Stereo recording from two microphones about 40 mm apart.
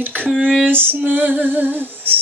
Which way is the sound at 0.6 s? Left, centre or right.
Right.